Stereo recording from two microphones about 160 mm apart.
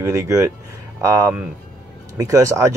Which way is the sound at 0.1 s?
20° right (ahead or behind).